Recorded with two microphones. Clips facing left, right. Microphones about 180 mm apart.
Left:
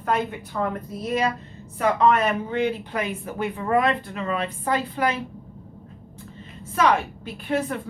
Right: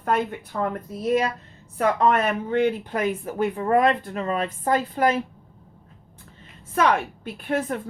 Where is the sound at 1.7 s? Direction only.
50° right (ahead or behind).